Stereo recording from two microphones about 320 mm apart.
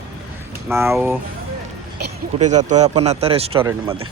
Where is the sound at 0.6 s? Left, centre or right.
Centre.